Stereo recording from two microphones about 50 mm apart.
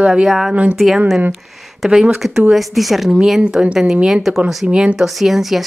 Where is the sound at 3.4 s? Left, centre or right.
Right.